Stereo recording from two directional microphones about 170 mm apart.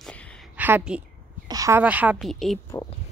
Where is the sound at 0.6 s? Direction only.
10° right (ahead or behind).